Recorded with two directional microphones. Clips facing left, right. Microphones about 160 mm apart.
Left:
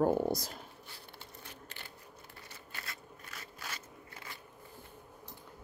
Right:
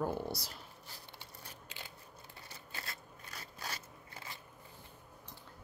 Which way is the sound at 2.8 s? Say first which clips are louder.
Left 1 dB; 35° right (ahead or behind).